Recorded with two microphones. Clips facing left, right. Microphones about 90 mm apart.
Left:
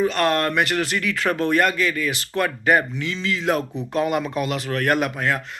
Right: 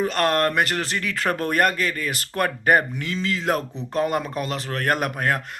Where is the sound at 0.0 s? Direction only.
45° right (ahead or behind).